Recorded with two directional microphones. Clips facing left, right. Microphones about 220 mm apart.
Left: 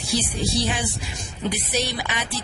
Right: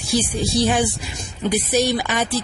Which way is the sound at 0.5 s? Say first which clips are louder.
Right 10 dB; 50° right (ahead or behind).